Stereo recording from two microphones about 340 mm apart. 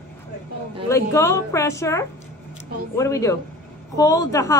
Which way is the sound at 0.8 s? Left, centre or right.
Centre.